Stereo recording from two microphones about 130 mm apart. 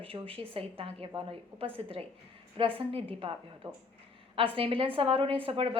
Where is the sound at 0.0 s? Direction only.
45° right (ahead or behind).